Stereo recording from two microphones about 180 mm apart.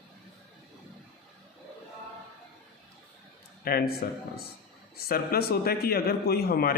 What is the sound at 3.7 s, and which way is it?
A man's voice, 55° left (ahead or behind).